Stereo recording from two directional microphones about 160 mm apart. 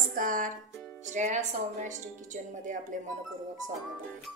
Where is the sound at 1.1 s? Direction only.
50° right (ahead or behind).